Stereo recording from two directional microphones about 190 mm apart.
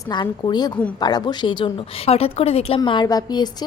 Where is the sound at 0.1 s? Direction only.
25° left (ahead or behind).